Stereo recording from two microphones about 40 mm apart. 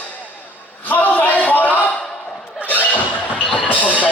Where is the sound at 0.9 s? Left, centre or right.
Left.